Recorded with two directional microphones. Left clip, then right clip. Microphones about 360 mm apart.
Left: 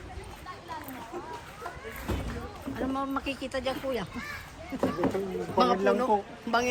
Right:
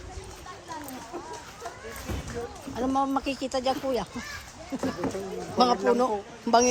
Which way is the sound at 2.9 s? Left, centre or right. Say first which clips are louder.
Right 7 dB; centre.